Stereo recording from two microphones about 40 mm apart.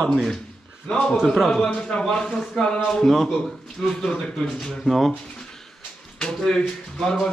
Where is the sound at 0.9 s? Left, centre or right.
Centre.